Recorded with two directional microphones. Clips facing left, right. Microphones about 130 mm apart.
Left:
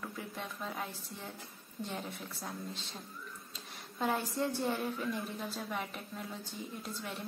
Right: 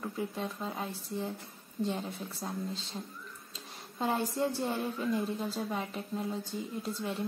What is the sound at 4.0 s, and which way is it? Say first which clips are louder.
A woman's voice: right 3 dB; 25° right (ahead or behind).